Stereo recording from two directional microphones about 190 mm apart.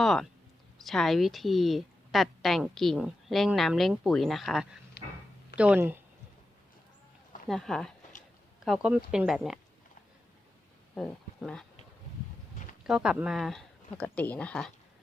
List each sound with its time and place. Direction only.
0.0 s a woman's voice: centre (ahead or behind)
5.0 s a sound: 60° left (ahead or behind)
5.5 s speech: 5° right (ahead or behind)
7.4 s a woman's voice: centre (ahead or behind)
10.9 s speech: centre (ahead or behind)
12.8 s a woman's voice: 5° right (ahead or behind)